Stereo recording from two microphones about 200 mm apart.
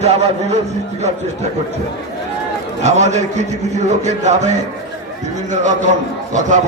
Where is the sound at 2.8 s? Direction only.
35° right (ahead or behind).